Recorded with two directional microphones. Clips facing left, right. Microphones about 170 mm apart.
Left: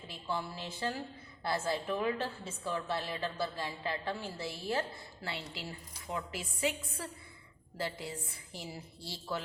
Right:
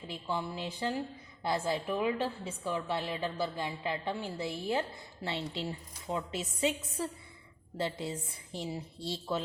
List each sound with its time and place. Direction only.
0.1 s a woman's voice: 15° right (ahead or behind)